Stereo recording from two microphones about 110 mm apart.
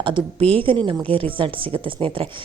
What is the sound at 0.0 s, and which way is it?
A woman's voice, 50° right (ahead or behind).